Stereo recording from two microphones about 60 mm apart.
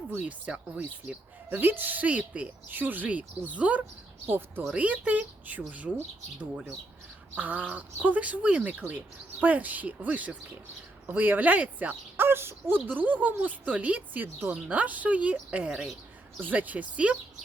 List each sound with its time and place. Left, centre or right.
0.2 s a woman's voice: right
4.3 s speech: right
4.7 s a woman's voice: right
7.3 s a woman's voice: right
12.1 s speech: right
12.9 s a woman's voice: right
16.5 s a woman's voice: right